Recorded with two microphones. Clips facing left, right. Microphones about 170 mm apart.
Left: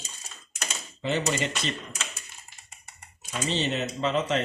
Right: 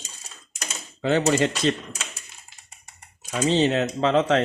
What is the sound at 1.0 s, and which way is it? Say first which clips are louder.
Speech: right 7 dB; 90° right.